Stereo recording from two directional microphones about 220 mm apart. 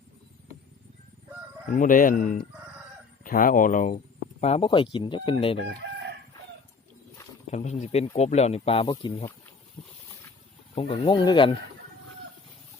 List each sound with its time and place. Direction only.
1.7 s speech: 35° left (ahead or behind)
7.5 s speech: 30° left (ahead or behind)
10.8 s speech: 20° left (ahead or behind)